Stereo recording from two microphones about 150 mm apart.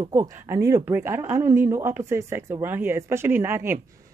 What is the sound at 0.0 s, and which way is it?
A woman's voice, 20° right (ahead or behind).